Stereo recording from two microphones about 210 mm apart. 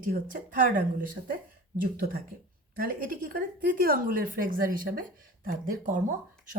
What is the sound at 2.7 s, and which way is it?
A woman's voice, 45° right (ahead or behind).